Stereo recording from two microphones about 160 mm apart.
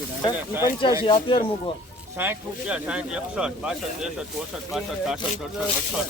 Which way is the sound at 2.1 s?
10° right (ahead or behind).